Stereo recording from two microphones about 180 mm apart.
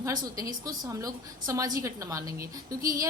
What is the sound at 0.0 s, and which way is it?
A woman's voice, 20° right (ahead or behind).